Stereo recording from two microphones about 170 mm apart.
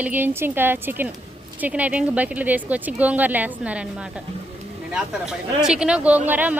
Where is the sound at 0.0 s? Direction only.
10° right (ahead or behind).